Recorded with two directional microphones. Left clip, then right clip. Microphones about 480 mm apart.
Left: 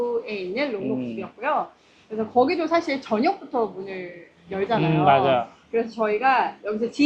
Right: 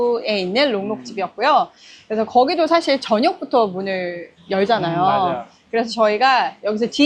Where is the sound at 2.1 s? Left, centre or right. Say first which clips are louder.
Right 5 dB; right.